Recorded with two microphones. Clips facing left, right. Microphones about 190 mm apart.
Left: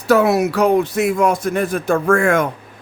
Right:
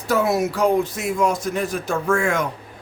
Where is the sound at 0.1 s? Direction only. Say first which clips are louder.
Left 6 dB; 70° left (ahead or behind).